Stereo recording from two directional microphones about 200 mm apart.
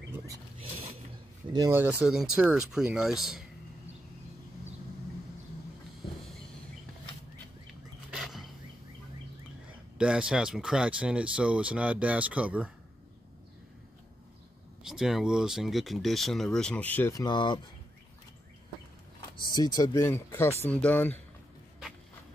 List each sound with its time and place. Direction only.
0.6 s a sound: 30° right (ahead or behind)
1.5 s speech: 15° right (ahead or behind)
8.1 s a sound: centre (ahead or behind)
9.9 s speech: 5° right (ahead or behind)
14.8 s speech: centre (ahead or behind); by 17.6 s 20° left (ahead or behind)
19.5 s speech: 20° left (ahead or behind)